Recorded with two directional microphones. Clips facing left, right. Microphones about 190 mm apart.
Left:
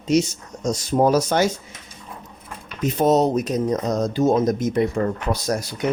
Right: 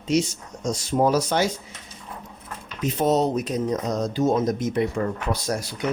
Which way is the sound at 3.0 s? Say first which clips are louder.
Left 4 dB; 45° left (ahead or behind).